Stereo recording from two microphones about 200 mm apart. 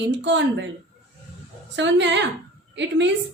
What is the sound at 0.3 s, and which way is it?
Speech, 65° right (ahead or behind).